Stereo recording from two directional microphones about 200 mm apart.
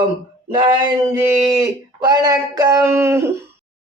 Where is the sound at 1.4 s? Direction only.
20° right (ahead or behind).